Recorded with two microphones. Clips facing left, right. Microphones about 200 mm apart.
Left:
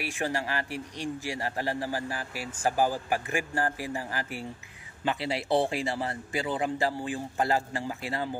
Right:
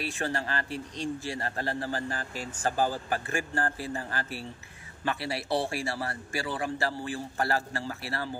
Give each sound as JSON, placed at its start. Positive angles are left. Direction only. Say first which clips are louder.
{"t": 0.0, "sound": "a man's voice", "louder": "left 1 dB", "side_deg": 15}